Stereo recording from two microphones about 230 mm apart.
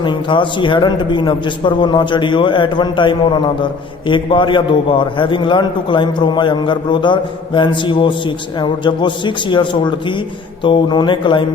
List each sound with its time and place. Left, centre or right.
0.0 s a man's voice: left